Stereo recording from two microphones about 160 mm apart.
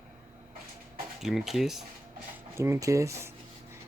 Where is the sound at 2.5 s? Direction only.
15° right (ahead or behind).